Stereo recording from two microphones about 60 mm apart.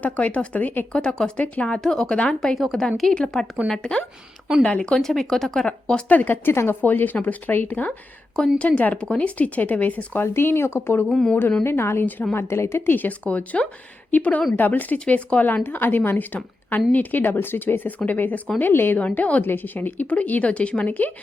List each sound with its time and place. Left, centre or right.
0.0 s speech: left
0.9 s a woman's voice: centre
6.1 s speech: left
6.8 s speech: left
10.2 s speech: left
11.1 s speech: centre
11.6 s speech: left
15.6 s speech: left
18.9 s speech: left